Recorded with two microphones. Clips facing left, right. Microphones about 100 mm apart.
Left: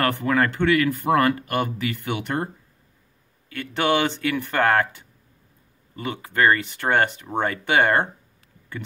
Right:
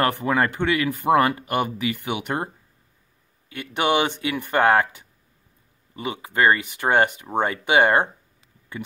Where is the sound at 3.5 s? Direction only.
20° right (ahead or behind).